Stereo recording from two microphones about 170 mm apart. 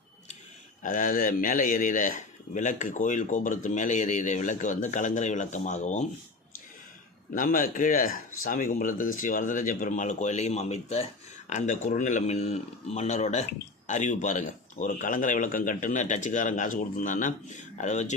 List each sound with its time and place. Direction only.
0.8 s speech: 50° left (ahead or behind)
7.3 s speech: 55° left (ahead or behind)